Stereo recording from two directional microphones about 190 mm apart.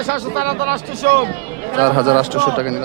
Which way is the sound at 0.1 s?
55° right (ahead or behind).